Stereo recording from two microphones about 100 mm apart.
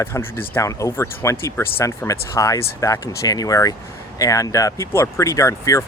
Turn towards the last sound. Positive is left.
turn(degrees=30)  # may be behind; listen again after turning